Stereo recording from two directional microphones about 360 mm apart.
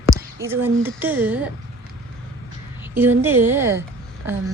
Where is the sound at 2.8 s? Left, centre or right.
Centre.